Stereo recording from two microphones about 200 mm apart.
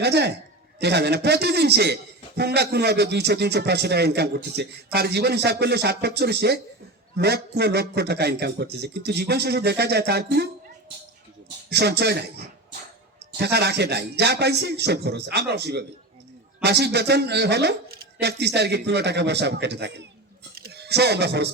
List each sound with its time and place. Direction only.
0.0 s a man's voice: 55° right (ahead or behind)
13.4 s a man's voice: 55° right (ahead or behind)
20.6 s a sound: 55° right (ahead or behind)